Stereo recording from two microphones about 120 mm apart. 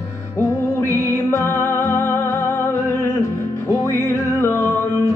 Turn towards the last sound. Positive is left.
turn(degrees=20)  # may be behind; listen again after turning